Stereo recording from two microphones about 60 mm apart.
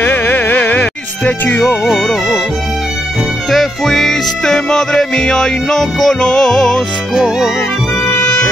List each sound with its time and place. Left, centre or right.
0.0 s music: left
1.9 s music: centre
3.4 s music: centre
7.2 s music: centre